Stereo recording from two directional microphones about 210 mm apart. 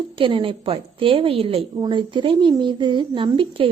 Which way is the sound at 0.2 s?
25° right (ahead or behind).